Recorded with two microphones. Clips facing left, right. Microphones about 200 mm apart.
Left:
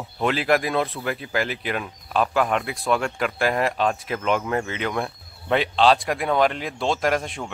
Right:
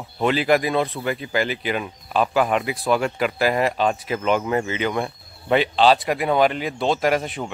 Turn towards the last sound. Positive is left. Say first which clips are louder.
# right 2 dB
turn(degrees=-5)  # may be behind; listen again after turning